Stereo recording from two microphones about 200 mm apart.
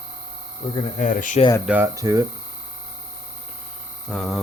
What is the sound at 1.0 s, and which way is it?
Speech, 40° left (ahead or behind).